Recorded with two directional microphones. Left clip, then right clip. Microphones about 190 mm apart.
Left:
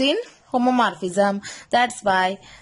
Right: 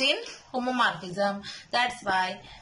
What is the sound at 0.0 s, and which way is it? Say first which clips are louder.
Speech: left 5 dB; 50° left (ahead or behind).